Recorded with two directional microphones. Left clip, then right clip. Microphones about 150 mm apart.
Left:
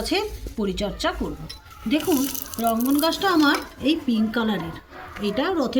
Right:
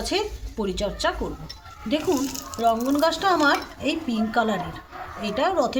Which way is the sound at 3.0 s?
30° right (ahead or behind).